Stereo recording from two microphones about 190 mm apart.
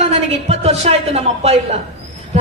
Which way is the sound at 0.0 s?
35° right (ahead or behind).